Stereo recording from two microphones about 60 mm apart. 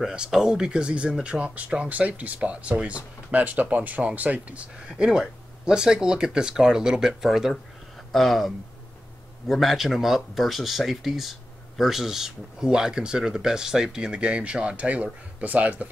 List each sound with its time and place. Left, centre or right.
0.0 s speech: centre
4.8 s speech: centre